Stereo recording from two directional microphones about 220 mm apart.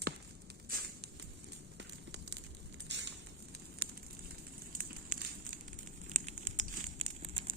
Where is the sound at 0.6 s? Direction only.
40° right (ahead or behind).